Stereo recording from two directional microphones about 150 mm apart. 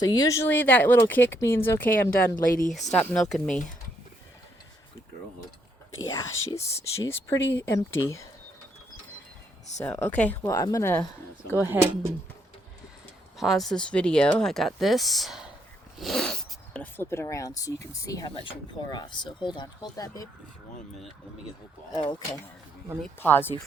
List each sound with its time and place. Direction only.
0.0 s speech: 25° left (ahead or behind)
2.5 s speech: 65° left (ahead or behind)
2.9 s speech: 5° left (ahead or behind)
6.1 s speech: 20° left (ahead or behind)
9.8 s speech: 10° left (ahead or behind)
11.6 s speech: 15° right (ahead or behind)
13.3 s speech: centre (ahead or behind); by 20.2 s 25° left (ahead or behind)
21.9 s speech: 30° left (ahead or behind)
23.2 s speech: 15° left (ahead or behind)